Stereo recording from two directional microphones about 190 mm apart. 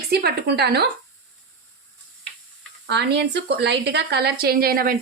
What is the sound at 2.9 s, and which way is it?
A woman's voice, 65° right (ahead or behind).